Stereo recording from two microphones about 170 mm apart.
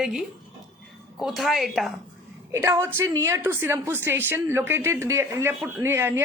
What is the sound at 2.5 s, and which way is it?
A woman's voice, 15° right (ahead or behind).